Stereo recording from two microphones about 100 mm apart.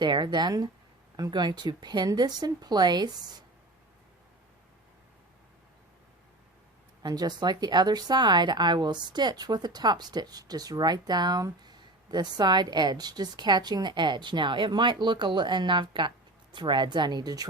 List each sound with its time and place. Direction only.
0.0 s a woman's voice: 50° right (ahead or behind)
7.0 s a woman's voice: 40° right (ahead or behind)